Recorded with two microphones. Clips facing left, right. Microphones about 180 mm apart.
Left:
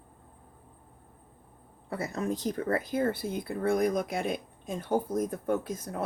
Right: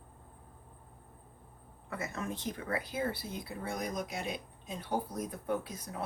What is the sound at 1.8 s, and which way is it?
Speech, 35° left (ahead or behind).